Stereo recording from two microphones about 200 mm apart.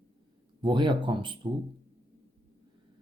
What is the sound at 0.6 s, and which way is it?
Speech, 25° right (ahead or behind).